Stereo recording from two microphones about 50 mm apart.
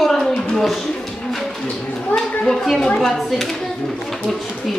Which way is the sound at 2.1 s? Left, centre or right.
Centre.